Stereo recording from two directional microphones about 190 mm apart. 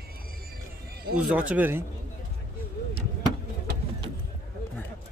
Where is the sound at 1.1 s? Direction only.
5° right (ahead or behind).